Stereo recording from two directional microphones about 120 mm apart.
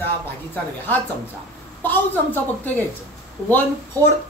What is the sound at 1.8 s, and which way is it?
A woman's voice, 15° left (ahead or behind).